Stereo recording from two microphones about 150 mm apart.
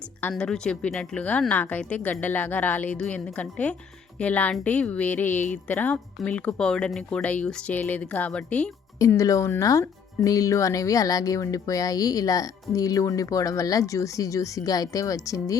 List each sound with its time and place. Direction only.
0.2 s a woman's voice: 10° left (ahead or behind)
9.0 s speech: 20° left (ahead or behind)